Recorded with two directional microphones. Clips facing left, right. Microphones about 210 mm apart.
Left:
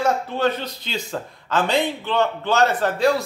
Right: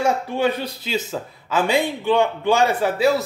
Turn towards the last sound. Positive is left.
turn(degrees=-5)  # may be behind; listen again after turning